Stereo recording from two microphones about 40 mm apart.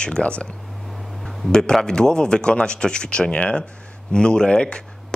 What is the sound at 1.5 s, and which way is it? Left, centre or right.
A man's voice, centre.